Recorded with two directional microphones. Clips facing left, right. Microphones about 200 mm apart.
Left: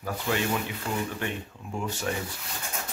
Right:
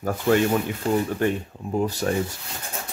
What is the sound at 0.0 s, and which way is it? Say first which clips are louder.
Speech: right 9 dB; 45° right (ahead or behind).